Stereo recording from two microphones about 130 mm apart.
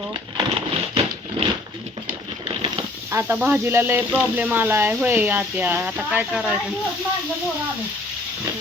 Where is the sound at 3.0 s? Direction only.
20° right (ahead or behind).